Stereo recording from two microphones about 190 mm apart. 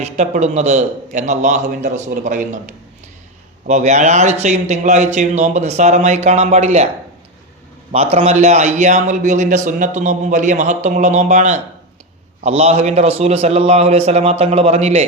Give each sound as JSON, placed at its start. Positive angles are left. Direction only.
{"t": 0.0, "sound": "a man's voice", "side_deg": -35}
{"t": 3.7, "sound": "a man's voice", "side_deg": -35}
{"t": 7.9, "sound": "a man's voice", "side_deg": -35}